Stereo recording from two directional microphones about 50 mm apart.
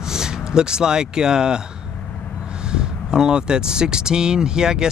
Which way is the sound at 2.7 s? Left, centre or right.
Centre.